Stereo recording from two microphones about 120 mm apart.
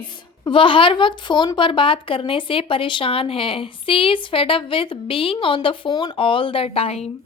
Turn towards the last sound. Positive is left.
turn(degrees=55)  # may be behind; listen again after turning